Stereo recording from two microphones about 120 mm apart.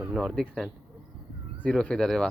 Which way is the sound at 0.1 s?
Centre (ahead or behind).